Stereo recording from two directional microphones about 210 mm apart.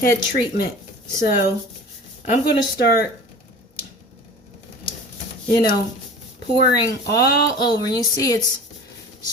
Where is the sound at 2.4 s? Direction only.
50° left (ahead or behind).